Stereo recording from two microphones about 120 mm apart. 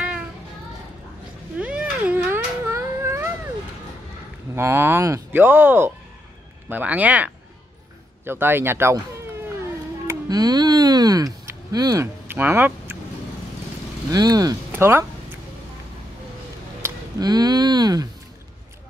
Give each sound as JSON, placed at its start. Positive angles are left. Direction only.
{"t": 1.6, "sound": "cat", "side_deg": -10}
{"t": 4.6, "sound": "speech", "side_deg": -20}
{"t": 10.0, "sound": "music", "side_deg": -35}
{"t": 12.3, "sound": "speech", "side_deg": -20}
{"t": 14.1, "sound": "speech", "side_deg": -30}
{"t": 14.7, "sound": "speech", "side_deg": -20}
{"t": 16.8, "sound": "a sound", "side_deg": -20}
{"t": 17.2, "sound": "speech", "side_deg": -35}